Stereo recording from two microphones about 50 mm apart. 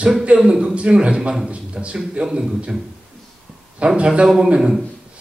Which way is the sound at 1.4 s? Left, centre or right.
Right.